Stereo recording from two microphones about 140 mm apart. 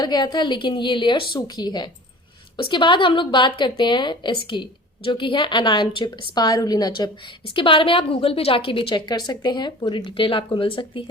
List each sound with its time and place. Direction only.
0.0 s a woman's voice: 30° left (ahead or behind)